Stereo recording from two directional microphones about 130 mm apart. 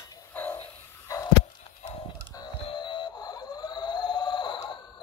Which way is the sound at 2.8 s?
35° left (ahead or behind).